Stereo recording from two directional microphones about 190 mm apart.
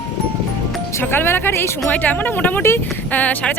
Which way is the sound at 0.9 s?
10° left (ahead or behind).